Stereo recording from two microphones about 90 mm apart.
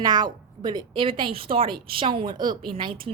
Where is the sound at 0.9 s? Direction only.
75° right (ahead or behind).